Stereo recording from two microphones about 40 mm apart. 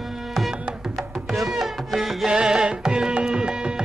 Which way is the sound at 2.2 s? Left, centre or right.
Centre.